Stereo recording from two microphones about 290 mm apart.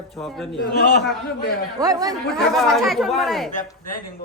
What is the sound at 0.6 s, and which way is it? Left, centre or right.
Speech, left.